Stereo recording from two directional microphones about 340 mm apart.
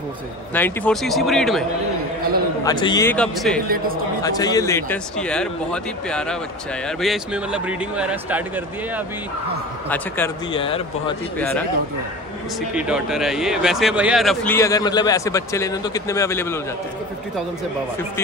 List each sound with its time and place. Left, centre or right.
0.6 s speech: centre
2.6 s a man's voice: centre
3.6 s a man's voice: right
4.2 s speech: centre
9.8 s a man's voice: centre
11.3 s speech: centre
12.7 s a man's voice: centre